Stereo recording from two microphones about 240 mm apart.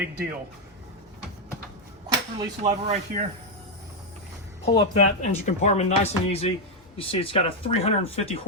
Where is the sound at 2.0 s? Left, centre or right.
Centre.